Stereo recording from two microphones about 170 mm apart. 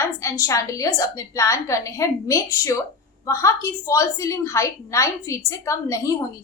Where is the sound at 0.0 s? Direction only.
15° left (ahead or behind).